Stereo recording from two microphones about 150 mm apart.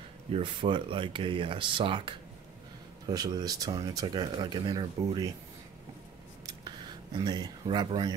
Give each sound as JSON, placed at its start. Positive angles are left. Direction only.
{"t": 0.3, "sound": "speech", "side_deg": -35}
{"t": 7.2, "sound": "speech", "side_deg": -25}